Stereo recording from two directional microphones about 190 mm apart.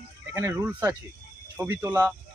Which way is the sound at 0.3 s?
15° right (ahead or behind).